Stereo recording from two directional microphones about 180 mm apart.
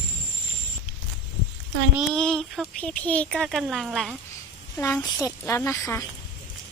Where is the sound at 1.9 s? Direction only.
5° left (ahead or behind).